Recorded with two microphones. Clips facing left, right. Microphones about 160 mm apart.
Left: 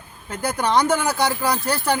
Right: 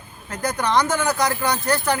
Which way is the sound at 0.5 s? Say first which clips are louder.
Left 2 dB; 30° left (ahead or behind).